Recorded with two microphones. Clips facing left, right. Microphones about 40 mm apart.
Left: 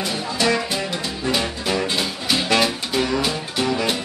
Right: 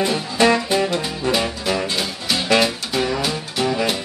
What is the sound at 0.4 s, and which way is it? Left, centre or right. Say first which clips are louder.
Music: right 5 dB; right.